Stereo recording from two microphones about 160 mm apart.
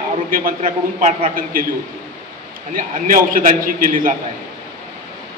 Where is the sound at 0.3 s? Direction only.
60° right (ahead or behind).